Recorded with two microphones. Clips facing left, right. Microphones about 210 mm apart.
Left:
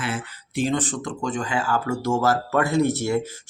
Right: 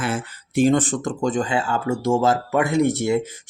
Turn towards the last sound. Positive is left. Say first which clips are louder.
# right 2 dB
turn(degrees=-20)  # may be behind; listen again after turning